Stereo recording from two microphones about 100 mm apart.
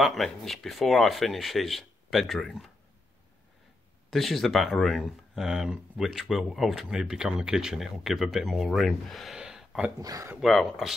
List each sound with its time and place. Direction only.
0.0 s speech: centre (ahead or behind)
4.1 s speech: centre (ahead or behind)
9.9 s speech: 35° right (ahead or behind)
10.4 s speech: centre (ahead or behind)